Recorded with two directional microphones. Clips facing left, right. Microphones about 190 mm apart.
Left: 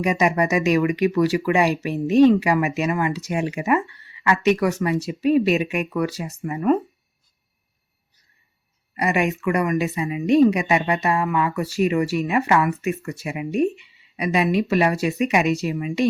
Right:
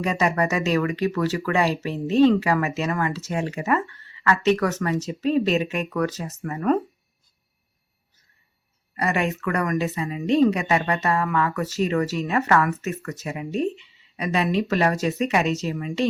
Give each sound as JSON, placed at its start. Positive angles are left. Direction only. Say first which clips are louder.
{"t": 0.0, "sound": "speech", "louder": "left 3 dB", "side_deg": 15}
{"t": 9.0, "sound": "speech", "louder": "left 2 dB", "side_deg": 15}